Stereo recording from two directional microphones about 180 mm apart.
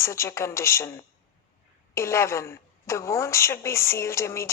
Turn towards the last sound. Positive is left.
turn(degrees=15)  # may be behind; listen again after turning